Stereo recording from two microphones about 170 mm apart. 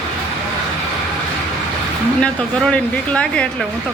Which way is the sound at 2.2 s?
5° left (ahead or behind).